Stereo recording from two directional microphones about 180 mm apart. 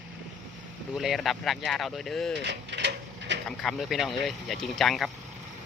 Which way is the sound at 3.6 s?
Centre (ahead or behind).